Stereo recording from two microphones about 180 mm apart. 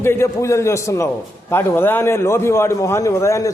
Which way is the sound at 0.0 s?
15° left (ahead or behind).